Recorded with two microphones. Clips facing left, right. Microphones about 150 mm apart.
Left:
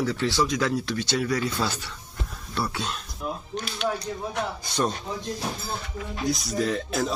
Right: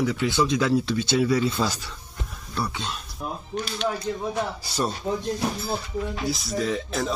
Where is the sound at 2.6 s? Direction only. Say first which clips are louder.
Left 1 dB; centre (ahead or behind).